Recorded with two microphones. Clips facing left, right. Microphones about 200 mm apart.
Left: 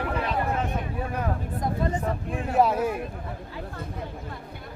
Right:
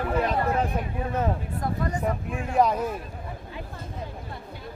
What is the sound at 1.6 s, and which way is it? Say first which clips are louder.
Speech: even; 25° left (ahead or behind).